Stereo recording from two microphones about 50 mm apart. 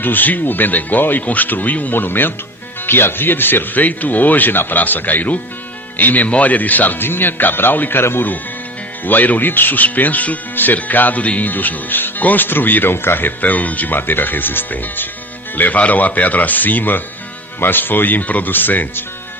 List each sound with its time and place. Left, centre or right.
0.0 s speech: left
9.0 s speech: left